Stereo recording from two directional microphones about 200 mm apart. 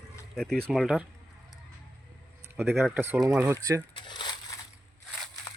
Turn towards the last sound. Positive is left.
turn(degrees=20)  # may be behind; listen again after turning